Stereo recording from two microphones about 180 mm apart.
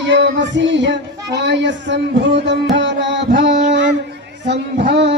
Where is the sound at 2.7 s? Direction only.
80° right.